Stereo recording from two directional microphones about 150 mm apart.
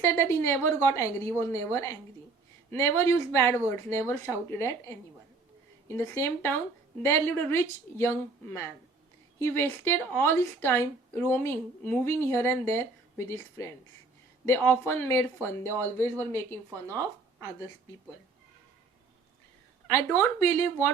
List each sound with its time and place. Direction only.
0.0 s a woman's voice: 20° left (ahead or behind)
16.6 s speech: 20° right (ahead or behind)
19.9 s a woman's voice: 15° left (ahead or behind)